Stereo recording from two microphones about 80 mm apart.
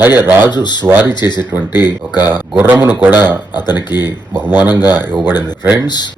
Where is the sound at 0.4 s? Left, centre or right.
Left.